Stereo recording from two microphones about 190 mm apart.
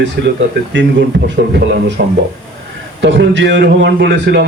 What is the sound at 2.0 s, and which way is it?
Speech, 50° right (ahead or behind).